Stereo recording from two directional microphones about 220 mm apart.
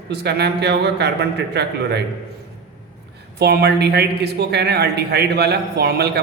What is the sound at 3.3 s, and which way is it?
Speech, 50° right (ahead or behind).